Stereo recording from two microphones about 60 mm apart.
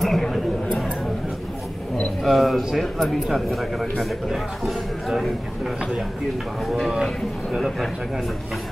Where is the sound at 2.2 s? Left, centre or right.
Centre.